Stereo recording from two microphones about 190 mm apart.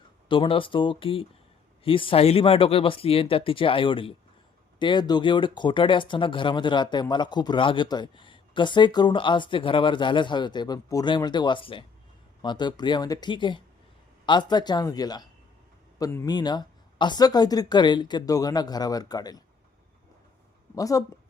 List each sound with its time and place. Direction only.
0.3 s speech: 25° left (ahead or behind)
20.7 s speech: 20° left (ahead or behind)